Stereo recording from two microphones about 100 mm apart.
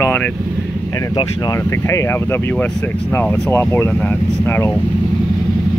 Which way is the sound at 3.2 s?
25° left (ahead or behind).